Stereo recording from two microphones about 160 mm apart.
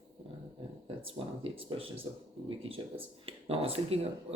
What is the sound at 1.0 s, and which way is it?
Speech, 35° right (ahead or behind).